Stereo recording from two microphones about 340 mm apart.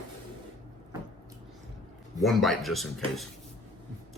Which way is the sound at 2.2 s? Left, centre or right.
Centre.